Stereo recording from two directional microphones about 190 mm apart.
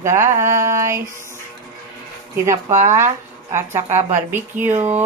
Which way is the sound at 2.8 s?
15° right (ahead or behind).